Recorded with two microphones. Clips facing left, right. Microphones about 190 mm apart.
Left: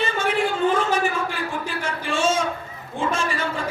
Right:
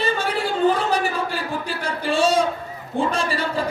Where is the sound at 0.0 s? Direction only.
35° right (ahead or behind).